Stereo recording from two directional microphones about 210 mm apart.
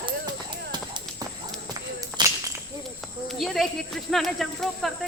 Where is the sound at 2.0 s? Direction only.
15° right (ahead or behind).